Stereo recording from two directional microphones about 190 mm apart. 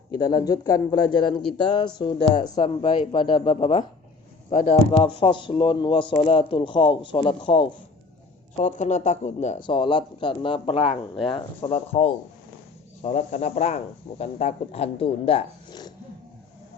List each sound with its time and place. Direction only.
0.2 s speech: 20° left (ahead or behind)
8.5 s speech: 40° left (ahead or behind)
9.6 s speech: 25° left (ahead or behind)